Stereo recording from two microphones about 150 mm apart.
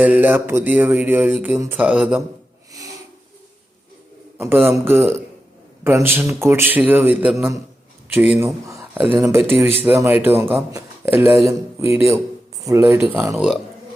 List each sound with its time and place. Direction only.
0.0 s speech: 10° right (ahead or behind)
4.4 s a man's voice: 15° right (ahead or behind)
13.3 s speech: centre (ahead or behind)